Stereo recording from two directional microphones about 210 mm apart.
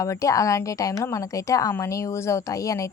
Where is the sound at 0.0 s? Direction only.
15° left (ahead or behind).